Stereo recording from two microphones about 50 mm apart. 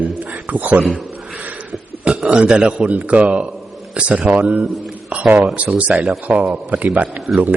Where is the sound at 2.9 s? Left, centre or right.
Right.